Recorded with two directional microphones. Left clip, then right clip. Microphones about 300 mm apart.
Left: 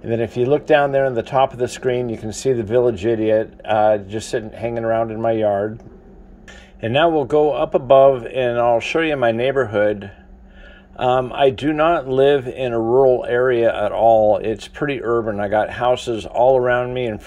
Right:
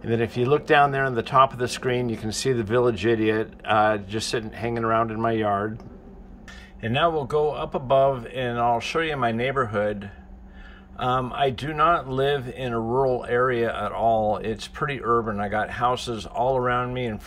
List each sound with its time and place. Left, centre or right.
0.0 s speech: centre
2.6 s speech: right
4.4 s speech: centre
6.8 s speech: centre